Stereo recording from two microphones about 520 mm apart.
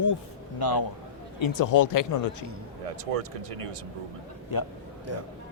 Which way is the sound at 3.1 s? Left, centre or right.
Right.